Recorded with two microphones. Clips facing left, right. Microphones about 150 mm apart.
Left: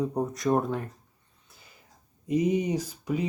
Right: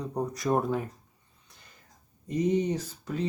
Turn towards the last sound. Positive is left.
turn(degrees=10)  # may be behind; listen again after turning